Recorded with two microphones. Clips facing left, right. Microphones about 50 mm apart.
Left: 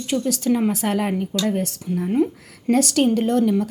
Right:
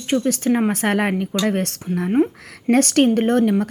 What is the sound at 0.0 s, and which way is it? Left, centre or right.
A woman's voice, right.